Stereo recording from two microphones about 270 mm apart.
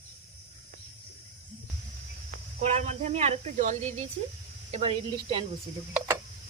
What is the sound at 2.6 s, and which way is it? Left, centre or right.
Speech, right.